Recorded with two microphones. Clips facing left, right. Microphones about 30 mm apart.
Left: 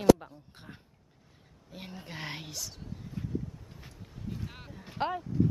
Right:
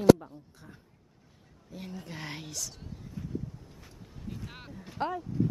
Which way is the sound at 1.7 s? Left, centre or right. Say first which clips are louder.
Right 1 dB; left.